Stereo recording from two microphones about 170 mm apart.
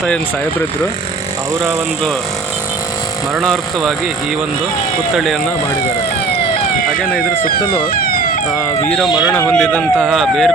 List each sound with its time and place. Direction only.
3.4 s speech: centre (ahead or behind)
5.1 s speech: centre (ahead or behind)
7.2 s speech: 60° left (ahead or behind)
8.8 s speech: 5° left (ahead or behind)